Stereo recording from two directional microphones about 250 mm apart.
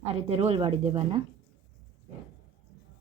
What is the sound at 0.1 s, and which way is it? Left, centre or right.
Speech, right.